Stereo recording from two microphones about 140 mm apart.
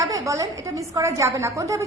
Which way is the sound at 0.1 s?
25° right (ahead or behind).